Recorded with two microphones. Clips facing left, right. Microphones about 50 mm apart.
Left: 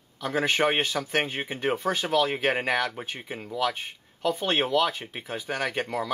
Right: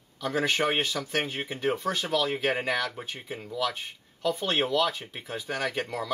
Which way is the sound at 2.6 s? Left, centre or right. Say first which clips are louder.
Left 2 dB; centre.